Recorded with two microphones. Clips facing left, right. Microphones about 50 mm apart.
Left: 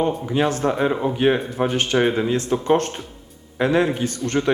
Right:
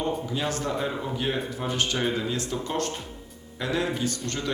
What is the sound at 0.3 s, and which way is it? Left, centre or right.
Speech, left.